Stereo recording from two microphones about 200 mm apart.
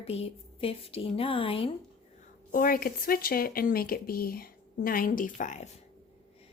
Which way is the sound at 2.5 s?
45° left (ahead or behind).